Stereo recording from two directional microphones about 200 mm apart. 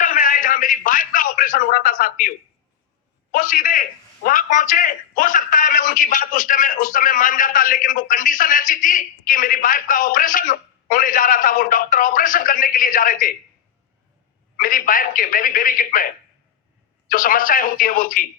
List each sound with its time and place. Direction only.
0.0 s a man's voice: 40° left (ahead or behind)
3.3 s a man's voice: 45° left (ahead or behind)
14.5 s a man's voice: 45° left (ahead or behind)